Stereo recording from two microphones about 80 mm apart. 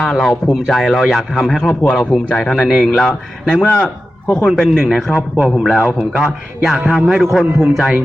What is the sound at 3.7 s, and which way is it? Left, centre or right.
A man's voice, centre.